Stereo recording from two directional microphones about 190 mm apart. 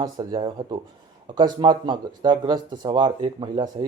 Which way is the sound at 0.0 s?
20° right (ahead or behind).